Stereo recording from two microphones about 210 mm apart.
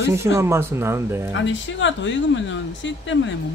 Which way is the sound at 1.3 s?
60° left (ahead or behind).